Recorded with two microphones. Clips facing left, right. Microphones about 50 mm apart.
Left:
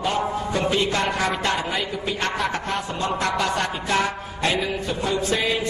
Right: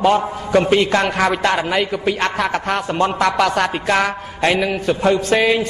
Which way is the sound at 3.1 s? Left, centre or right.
Right.